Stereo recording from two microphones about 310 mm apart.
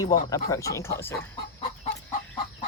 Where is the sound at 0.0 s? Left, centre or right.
Centre.